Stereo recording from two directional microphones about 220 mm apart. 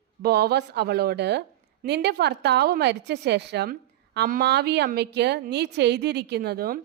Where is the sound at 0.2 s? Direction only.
45° right (ahead or behind).